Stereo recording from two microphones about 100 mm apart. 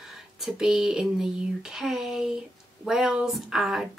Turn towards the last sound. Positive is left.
turn(degrees=-5)  # may be behind; listen again after turning